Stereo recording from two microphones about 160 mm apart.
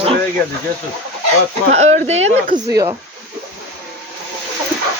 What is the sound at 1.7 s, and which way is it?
Speech, 45° right (ahead or behind).